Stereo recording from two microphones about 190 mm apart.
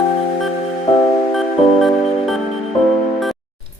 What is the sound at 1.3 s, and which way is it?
Music, centre (ahead or behind).